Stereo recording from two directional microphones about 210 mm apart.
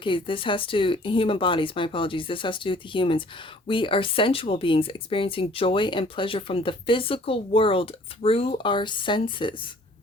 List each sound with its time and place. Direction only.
0.0 s speech: 25° left (ahead or behind)